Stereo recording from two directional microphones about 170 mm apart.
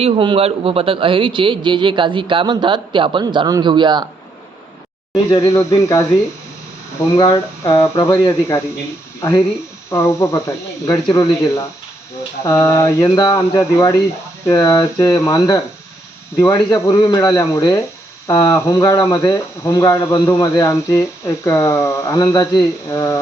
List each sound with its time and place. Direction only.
0.0 s a man's voice: 30° right (ahead or behind)
5.1 s speech: 25° left (ahead or behind)
7.2 s speech: 20° left (ahead or behind)
9.9 s speech: 15° left (ahead or behind)